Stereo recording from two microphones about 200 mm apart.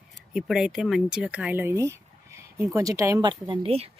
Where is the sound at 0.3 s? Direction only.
Centre (ahead or behind).